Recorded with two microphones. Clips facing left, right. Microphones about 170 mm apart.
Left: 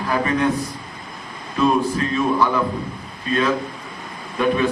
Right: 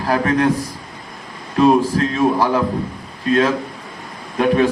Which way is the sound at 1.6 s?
85° right.